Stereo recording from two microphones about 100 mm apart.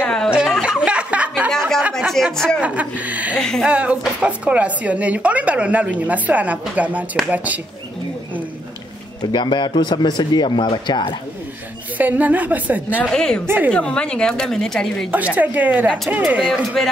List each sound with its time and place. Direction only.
0.5 s a sound: 5° right (ahead or behind)
2.0 s speech: centre (ahead or behind)
2.6 s a woman's voice: 15° right (ahead or behind)
3.3 s speech: 5° left (ahead or behind)
3.6 s a woman's voice: 15° right (ahead or behind)
9.3 s speech: 50° left (ahead or behind)
12.0 s a woman's voice: 15° right (ahead or behind)
13.1 s a woman's voice: 5° left (ahead or behind)
15.0 s a woman's voice: 15° right (ahead or behind)
16.4 s speech: 5° left (ahead or behind)